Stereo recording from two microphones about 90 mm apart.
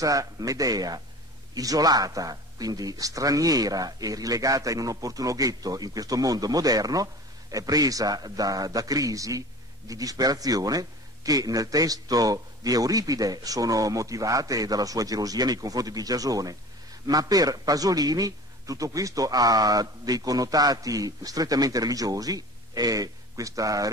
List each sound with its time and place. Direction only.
0.0 s speech: 40° right (ahead or behind)